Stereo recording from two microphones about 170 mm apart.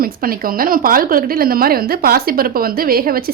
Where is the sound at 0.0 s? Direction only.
60° right (ahead or behind).